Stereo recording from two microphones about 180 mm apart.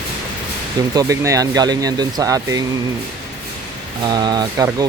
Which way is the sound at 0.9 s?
20° right (ahead or behind).